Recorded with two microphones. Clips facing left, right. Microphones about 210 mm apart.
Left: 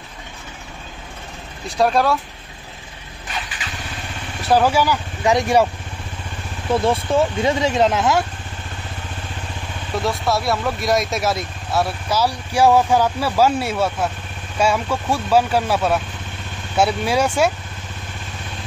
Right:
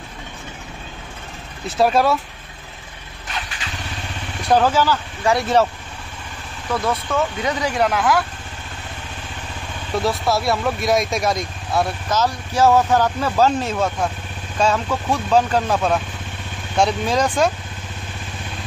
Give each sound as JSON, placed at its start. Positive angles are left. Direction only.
{"t": 1.8, "sound": "speech", "side_deg": 0}
{"t": 4.4, "sound": "speech", "side_deg": 5}
{"t": 6.7, "sound": "speech", "side_deg": 25}
{"t": 9.9, "sound": "speech", "side_deg": 0}